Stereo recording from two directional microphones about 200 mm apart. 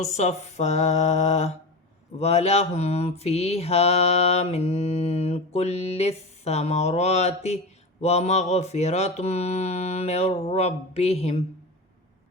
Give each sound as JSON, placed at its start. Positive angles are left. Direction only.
{"t": 0.0, "sound": "mantra", "side_deg": 35}